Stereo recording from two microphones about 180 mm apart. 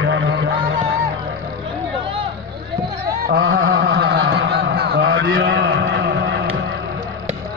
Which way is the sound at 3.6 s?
60° right (ahead or behind).